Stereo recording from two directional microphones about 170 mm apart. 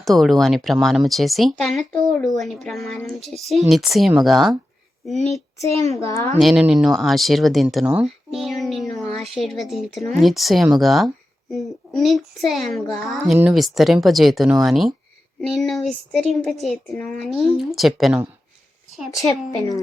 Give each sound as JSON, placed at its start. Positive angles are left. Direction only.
{"t": 0.0, "sound": "speech", "side_deg": 0}
{"t": 5.7, "sound": "a woman's voice", "side_deg": -40}
{"t": 6.0, "sound": "a woman's voice", "side_deg": 20}
{"t": 6.4, "sound": "speech", "side_deg": -5}
{"t": 7.9, "sound": "a sound", "side_deg": -5}
{"t": 9.3, "sound": "speech", "side_deg": 0}
{"t": 19.1, "sound": "a woman's voice", "side_deg": 20}